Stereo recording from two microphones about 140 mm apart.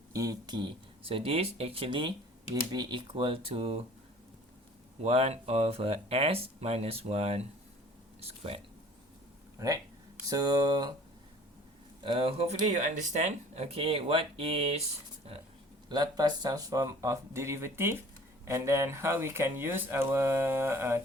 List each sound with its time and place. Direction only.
0.1 s speech: 25° right (ahead or behind); by 3.8 s 45° right (ahead or behind)
5.0 s speech: 45° right (ahead or behind)
9.6 s speech: 25° right (ahead or behind)
12.0 s speech: 40° right (ahead or behind)
15.9 s speech: 30° right (ahead or behind)